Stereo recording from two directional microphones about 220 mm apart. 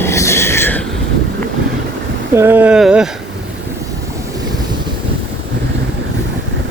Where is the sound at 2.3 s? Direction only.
10° right (ahead or behind).